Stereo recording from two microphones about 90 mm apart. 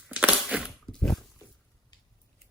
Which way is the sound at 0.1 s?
15° right (ahead or behind).